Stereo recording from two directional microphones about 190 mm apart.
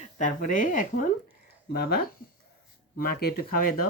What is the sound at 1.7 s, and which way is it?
Speech, 55° left (ahead or behind).